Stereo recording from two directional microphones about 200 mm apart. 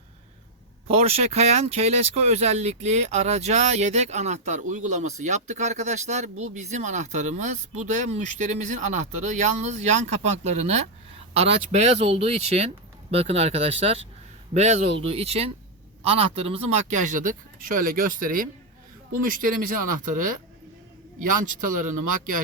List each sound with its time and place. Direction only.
0.9 s speech: 30° right (ahead or behind)